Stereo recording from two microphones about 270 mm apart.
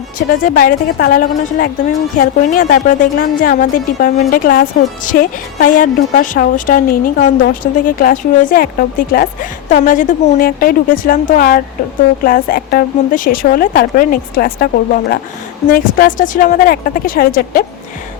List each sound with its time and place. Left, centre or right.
0.4 s a woman's voice: left